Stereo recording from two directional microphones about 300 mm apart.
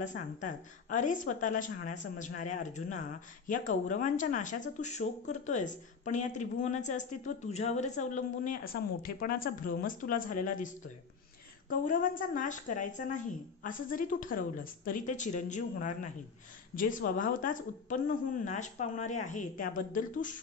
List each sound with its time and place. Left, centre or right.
0.0 s a woman's voice: left
11.7 s a woman's voice: left